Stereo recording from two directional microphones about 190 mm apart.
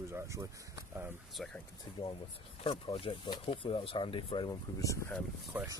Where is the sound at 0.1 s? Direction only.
15° right (ahead or behind).